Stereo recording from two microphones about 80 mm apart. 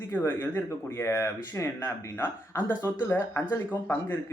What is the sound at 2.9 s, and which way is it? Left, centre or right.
Speech, left.